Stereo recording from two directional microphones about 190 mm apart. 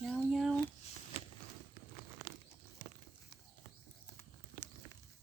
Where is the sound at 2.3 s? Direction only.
45° right (ahead or behind).